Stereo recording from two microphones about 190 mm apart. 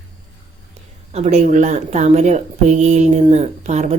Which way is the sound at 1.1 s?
35° right (ahead or behind).